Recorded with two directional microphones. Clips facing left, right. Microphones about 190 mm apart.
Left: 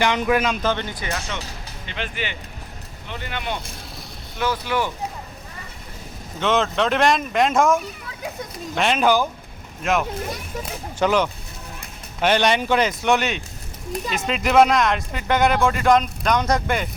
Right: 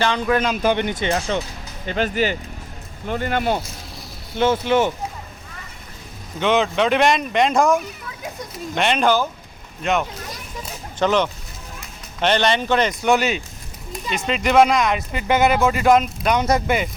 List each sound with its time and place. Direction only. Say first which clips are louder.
0.0 s speech: even; 15° left (ahead or behind)
0.6 s speech: right 5 dB; 15° right (ahead or behind)
1.9 s speech: right 10 dB; 40° right (ahead or behind)
4.4 s speech: right 6 dB; 25° right (ahead or behind)
6.4 s speech: right 2 dB; centre (ahead or behind)